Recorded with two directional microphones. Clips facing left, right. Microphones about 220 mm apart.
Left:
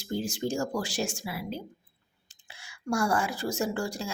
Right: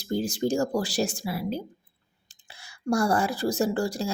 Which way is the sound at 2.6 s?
35° right (ahead or behind).